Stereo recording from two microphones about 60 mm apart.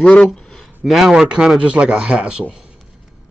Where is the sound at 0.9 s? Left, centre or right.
Centre.